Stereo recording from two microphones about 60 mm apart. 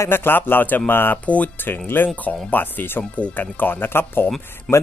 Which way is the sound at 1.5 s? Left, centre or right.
Left.